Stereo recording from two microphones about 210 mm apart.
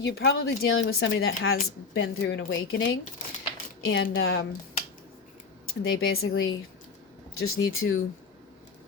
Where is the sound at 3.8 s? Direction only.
70° left (ahead or behind).